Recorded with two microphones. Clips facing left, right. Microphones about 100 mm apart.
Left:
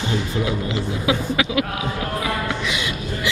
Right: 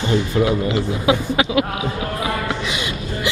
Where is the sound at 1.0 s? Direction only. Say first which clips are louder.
Right 3 dB; 30° right (ahead or behind).